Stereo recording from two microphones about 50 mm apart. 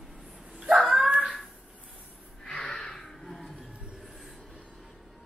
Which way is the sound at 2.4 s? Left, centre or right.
Left.